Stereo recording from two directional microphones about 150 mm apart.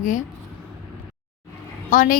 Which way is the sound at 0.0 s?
55° left (ahead or behind).